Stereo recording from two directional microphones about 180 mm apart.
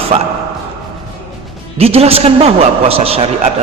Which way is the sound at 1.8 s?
35° right (ahead or behind).